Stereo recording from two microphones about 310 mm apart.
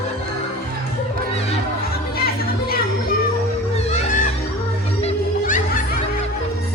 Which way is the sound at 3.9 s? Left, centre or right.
Left.